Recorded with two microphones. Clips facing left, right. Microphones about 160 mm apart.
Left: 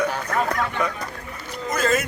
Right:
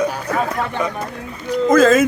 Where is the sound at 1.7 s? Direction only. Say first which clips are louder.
Right 10 dB; 90° right.